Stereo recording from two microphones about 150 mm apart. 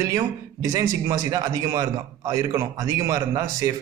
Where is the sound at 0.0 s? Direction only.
25° right (ahead or behind).